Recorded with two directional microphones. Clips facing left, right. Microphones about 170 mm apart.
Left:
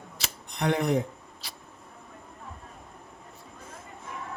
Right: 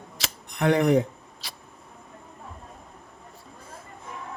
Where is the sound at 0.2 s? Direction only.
90° right.